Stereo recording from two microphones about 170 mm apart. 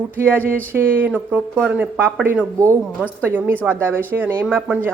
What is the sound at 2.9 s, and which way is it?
Speech, 10° left (ahead or behind).